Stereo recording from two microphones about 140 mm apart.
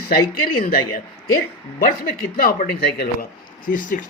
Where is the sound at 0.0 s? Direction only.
90° left.